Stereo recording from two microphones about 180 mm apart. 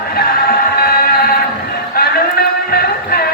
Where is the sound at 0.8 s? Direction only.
55° left (ahead or behind).